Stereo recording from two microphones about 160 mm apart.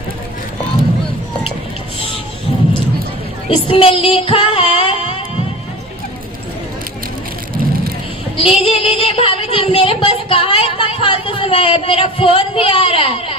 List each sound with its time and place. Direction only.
3.5 s child singing: 35° left (ahead or behind)
8.4 s a woman's voice: 35° left (ahead or behind)